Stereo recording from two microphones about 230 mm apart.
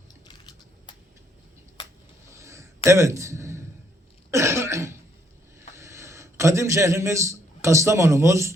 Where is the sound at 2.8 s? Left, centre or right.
Centre.